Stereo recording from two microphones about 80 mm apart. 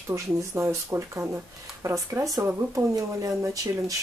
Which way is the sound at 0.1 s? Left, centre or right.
Right.